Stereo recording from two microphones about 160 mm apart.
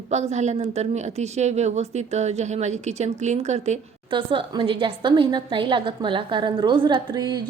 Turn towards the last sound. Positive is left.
turn(degrees=-25)  # may be behind; listen again after turning